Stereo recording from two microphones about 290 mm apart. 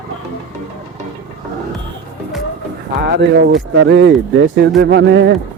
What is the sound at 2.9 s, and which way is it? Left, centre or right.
Speech, right.